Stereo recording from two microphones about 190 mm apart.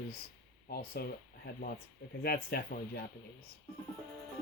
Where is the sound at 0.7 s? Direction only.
55° left (ahead or behind).